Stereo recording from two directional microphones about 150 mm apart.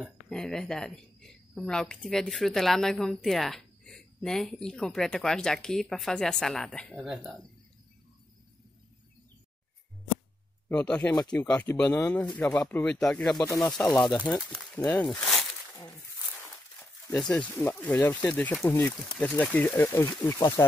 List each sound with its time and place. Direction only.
0.3 s a woman's voice: 5° left (ahead or behind)
10.7 s a woman's voice: 10° left (ahead or behind)
13.4 s speech: 20° left (ahead or behind)
14.3 s a woman's voice: centre (ahead or behind)
17.1 s speech: 5° left (ahead or behind); by 20.6 s 20° left (ahead or behind)